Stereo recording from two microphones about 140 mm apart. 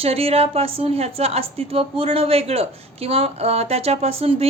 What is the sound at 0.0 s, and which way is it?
A woman's voice, 45° right (ahead or behind).